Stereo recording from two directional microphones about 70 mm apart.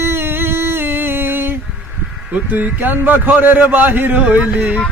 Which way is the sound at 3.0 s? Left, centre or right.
Right.